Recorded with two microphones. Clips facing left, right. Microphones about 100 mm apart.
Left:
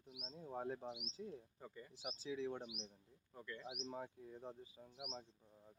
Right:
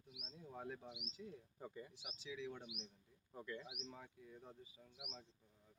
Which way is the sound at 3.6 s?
30° left (ahead or behind).